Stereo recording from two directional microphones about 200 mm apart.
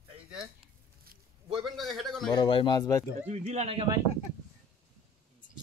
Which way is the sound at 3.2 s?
35° right (ahead or behind).